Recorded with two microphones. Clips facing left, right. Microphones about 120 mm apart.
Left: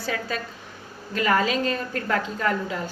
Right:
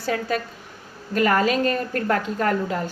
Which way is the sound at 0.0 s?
45° right (ahead or behind).